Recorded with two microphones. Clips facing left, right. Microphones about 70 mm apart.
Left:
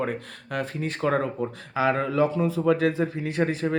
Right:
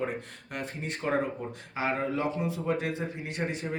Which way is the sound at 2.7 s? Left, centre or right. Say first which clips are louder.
Left 8 dB; left.